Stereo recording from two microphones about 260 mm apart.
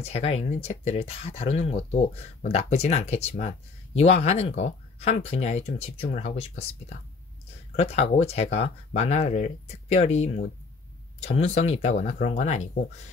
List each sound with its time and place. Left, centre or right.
0.0 s speech: left